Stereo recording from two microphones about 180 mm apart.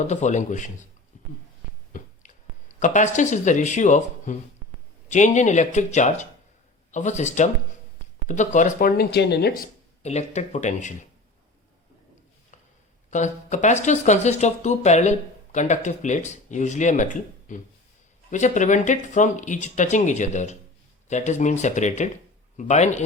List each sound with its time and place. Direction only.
0.1 s speech: 40° left (ahead or behind)
1.9 s a sound: 45° left (ahead or behind)
2.8 s speech: 45° left (ahead or behind)
9.0 s speech: 65° left (ahead or behind)
10.0 s speech: 40° left (ahead or behind)
13.1 s speech: 40° left (ahead or behind)